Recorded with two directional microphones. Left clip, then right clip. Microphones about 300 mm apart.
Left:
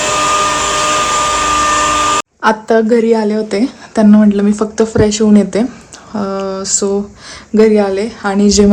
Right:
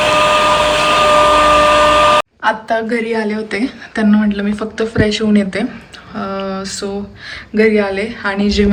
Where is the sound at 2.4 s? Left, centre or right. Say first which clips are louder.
Left 4 dB; left.